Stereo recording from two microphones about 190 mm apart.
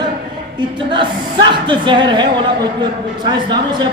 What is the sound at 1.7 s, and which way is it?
A woman's voice, 25° right (ahead or behind).